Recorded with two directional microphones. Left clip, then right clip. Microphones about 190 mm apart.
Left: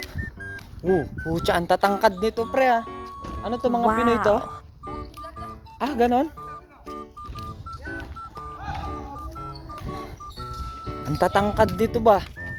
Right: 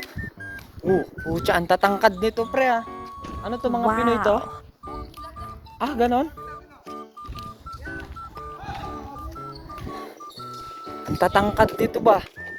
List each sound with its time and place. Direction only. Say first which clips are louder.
0.5 s speech: right 1 dB; centre (ahead or behind)
2.6 s speech: left 2 dB; 15° left (ahead or behind)
5.8 s speech: even; 10° left (ahead or behind)
7.9 s music: even; 5° left (ahead or behind)
11.0 s speech: right 2 dB; centre (ahead or behind)